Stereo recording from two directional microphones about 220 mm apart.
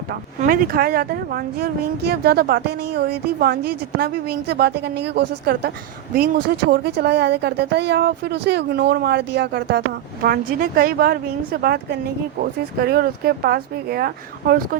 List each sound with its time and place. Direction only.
0.1 s speech: 40° right (ahead or behind)